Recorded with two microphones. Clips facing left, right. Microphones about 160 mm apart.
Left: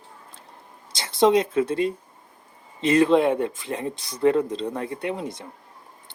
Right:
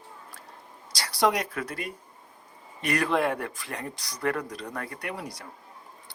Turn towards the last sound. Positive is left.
turn(degrees=25)  # may be behind; listen again after turning